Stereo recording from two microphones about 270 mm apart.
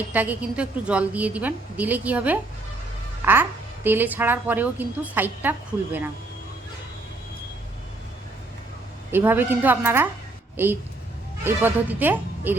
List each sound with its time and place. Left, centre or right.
0.1 s a woman's voice: centre
3.8 s a woman's voice: centre
9.1 s a woman's voice: centre